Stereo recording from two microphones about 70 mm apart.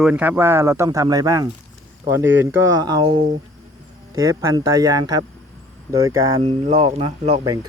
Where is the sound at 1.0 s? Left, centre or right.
Right.